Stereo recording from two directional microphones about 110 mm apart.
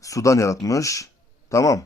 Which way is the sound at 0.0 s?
30° left (ahead or behind).